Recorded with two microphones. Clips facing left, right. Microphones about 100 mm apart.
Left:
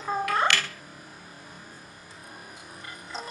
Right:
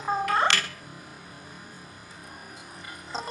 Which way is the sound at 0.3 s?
25° right (ahead or behind).